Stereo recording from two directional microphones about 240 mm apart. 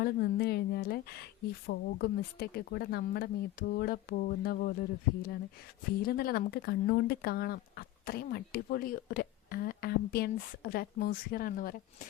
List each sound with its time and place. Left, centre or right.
0.0 s speech: left